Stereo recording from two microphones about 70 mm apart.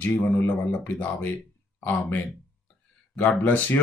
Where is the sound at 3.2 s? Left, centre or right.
Left.